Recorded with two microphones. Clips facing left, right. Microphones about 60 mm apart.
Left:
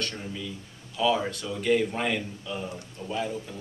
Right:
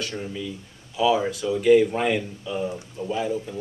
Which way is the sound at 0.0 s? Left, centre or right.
Centre.